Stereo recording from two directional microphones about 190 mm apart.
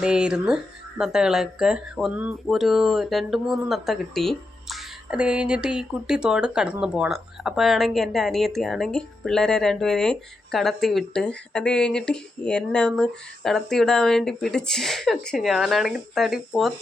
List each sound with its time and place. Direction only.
0.0 s speech: 5° right (ahead or behind)